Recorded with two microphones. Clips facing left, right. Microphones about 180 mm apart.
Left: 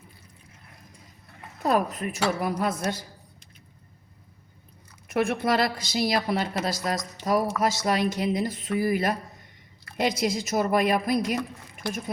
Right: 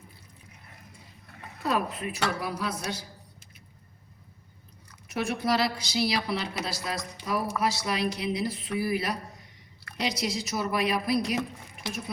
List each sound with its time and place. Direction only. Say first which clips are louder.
1.6 s a woman's voice: left 4 dB; 40° left (ahead or behind)
5.0 s a woman's voice: left 4 dB; 55° left (ahead or behind)